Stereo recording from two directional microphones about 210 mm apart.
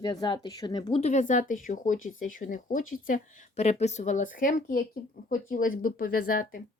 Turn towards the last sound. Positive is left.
turn(degrees=40)  # may be behind; listen again after turning